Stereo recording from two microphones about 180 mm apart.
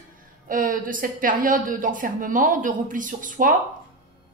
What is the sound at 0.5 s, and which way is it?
A woman's voice, 50° right (ahead or behind).